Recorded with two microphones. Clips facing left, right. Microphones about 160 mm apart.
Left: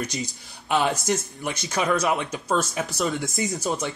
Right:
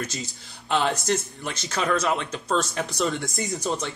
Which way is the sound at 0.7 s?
10° left (ahead or behind).